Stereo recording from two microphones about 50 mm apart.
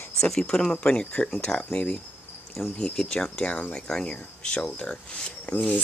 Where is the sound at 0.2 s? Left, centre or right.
Centre.